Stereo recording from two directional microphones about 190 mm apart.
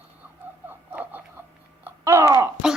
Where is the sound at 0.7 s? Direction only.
10° right (ahead or behind).